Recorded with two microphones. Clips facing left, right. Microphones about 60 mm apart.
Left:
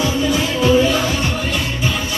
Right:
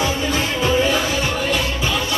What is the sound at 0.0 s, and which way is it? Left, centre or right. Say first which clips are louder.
Music: left 3 dB; right.